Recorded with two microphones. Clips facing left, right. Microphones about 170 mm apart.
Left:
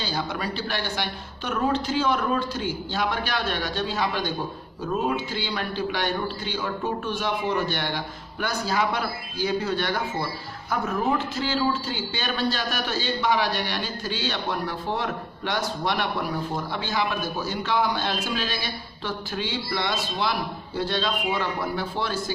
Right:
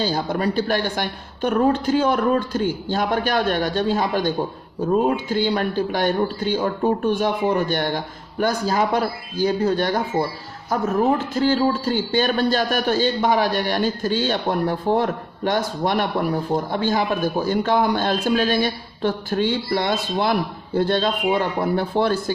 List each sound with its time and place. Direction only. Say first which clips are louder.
0.0 s a man's voice: right 7 dB; 45° right (ahead or behind)